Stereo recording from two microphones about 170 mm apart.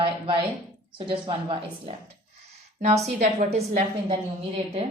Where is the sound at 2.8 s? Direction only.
40° right (ahead or behind).